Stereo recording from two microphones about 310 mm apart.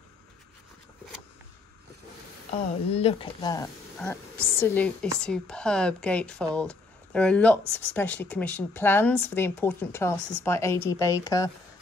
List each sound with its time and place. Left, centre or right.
2.9 s speech: centre